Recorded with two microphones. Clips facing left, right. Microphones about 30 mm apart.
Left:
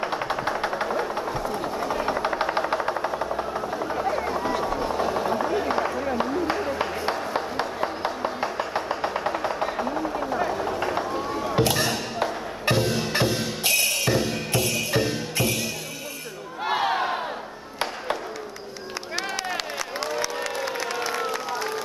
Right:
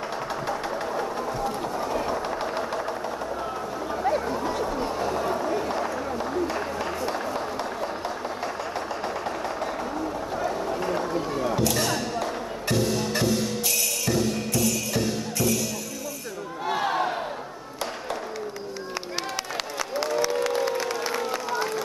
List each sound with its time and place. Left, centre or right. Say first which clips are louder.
0.0 s a sound: left 3 dB; left
4.2 s helicopter: left 2 dB; left
6.8 s a sound: left 2 dB; left
10.3 s vehicle: left 1 dB; left
11.5 s music: left 4 dB; left
16.6 s battle cry: left 2 dB; left
19.5 s a sound: even; centre
20.4 s crowd: right 3 dB; centre
21.2 s crowd: even; centre